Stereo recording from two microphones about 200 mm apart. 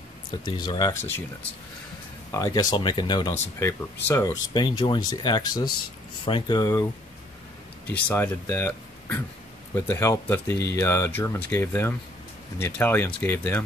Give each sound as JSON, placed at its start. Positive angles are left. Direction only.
{"t": 0.6, "sound": "speech", "side_deg": 20}
{"t": 2.3, "sound": "speech", "side_deg": 20}
{"t": 7.9, "sound": "speech", "side_deg": 10}